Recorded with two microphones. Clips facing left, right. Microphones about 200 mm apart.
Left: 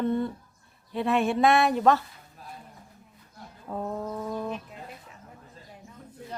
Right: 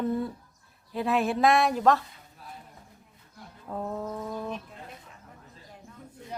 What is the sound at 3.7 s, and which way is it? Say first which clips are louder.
Bird: left 1 dB; centre (ahead or behind).